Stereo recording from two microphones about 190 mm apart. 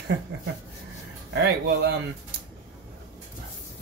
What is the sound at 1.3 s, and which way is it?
Speech, 65° right (ahead or behind).